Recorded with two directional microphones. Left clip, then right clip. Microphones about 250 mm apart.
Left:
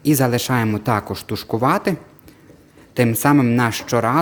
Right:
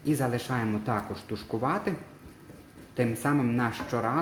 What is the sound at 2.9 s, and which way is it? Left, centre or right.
Speech, left.